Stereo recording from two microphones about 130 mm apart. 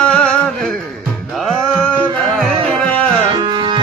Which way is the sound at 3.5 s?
35° right (ahead or behind).